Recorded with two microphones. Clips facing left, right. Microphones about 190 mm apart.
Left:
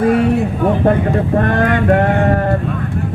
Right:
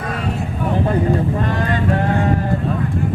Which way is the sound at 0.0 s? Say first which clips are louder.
Left 13 dB; 65° left (ahead or behind).